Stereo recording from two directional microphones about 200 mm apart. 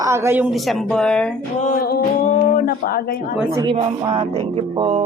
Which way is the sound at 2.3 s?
40° left (ahead or behind).